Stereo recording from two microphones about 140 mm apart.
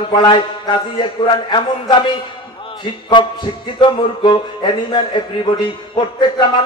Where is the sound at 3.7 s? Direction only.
35° left (ahead or behind).